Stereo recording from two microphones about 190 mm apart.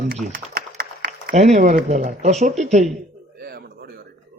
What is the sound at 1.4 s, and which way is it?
A man's voice, 40° right (ahead or behind).